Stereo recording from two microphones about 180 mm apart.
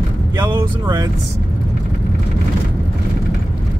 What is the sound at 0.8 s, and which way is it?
Speech, 25° right (ahead or behind).